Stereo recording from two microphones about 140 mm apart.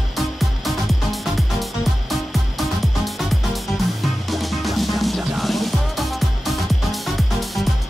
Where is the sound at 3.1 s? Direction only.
Centre (ahead or behind).